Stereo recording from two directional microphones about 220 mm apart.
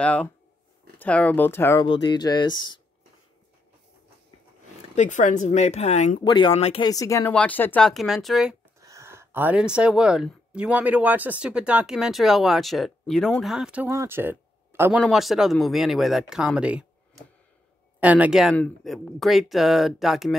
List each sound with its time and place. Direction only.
0.0 s speech: 5° left (ahead or behind)
4.9 s speech: 35° left (ahead or behind)
6.2 s speech: 20° left (ahead or behind); by 8.5 s centre (ahead or behind)
8.8 s speech: 15° right (ahead or behind)
18.0 s speech: 5° right (ahead or behind)